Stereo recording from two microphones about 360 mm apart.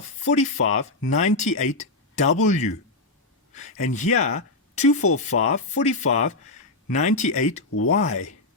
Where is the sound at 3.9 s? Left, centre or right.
Centre.